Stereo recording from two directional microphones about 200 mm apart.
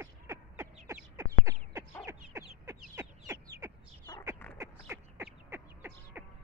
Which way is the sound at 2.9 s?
15° right (ahead or behind).